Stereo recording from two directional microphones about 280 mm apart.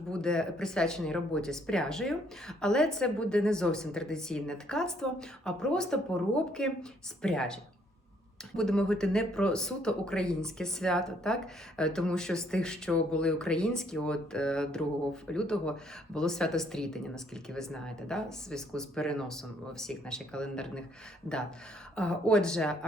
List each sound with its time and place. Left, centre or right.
0.1 s speech: centre
21.9 s speech: centre